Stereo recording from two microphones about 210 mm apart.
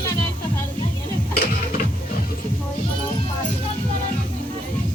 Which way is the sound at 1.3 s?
45° left (ahead or behind).